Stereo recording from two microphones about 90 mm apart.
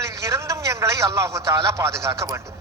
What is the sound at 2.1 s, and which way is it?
Speech, 50° right (ahead or behind).